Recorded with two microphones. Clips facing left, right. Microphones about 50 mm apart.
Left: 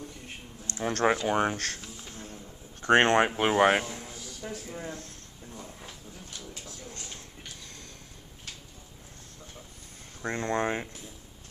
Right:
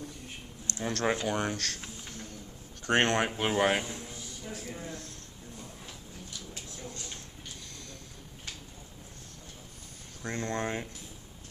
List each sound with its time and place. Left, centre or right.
0.7 s speech: left
2.0 s a sound: left
3.3 s speech: left
3.9 s a sound: left
4.7 s speech: left
10.2 s speech: left